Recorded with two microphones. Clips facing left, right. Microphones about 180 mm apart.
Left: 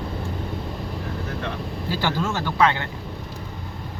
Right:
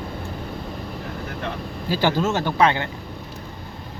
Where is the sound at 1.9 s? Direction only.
15° right (ahead or behind).